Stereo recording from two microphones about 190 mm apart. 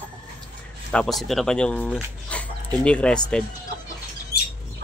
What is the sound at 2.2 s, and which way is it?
Dog, 5° left (ahead or behind).